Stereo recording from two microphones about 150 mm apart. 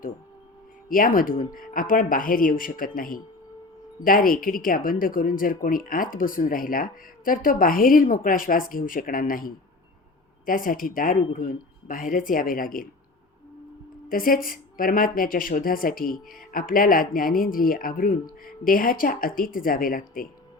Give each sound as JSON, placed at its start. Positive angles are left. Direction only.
{"t": 0.9, "sound": "speech", "side_deg": 70}
{"t": 14.1, "sound": "speech", "side_deg": 70}